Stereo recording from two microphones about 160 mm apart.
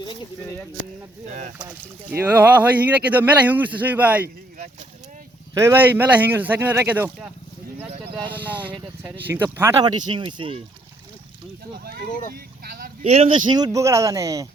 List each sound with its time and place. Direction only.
1.3 s speech: 50° right (ahead or behind)
1.5 s speech: 10° right (ahead or behind)
5.5 s speech: 15° right (ahead or behind)
8.6 s speech: 5° right (ahead or behind)
9.3 s speech: 15° right (ahead or behind); by 10.6 s 30° right (ahead or behind)
12.3 s a sound: 60° right (ahead or behind)
13.1 s speech: 40° right (ahead or behind)
13.7 s speech: 20° right (ahead or behind)